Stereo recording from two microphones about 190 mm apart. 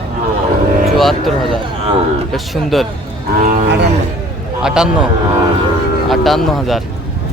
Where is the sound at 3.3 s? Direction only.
45° right (ahead or behind).